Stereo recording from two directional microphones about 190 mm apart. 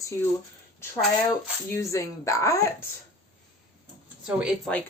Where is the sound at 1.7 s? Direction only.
15° left (ahead or behind).